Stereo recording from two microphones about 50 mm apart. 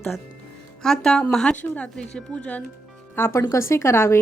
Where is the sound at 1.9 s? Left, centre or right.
Left.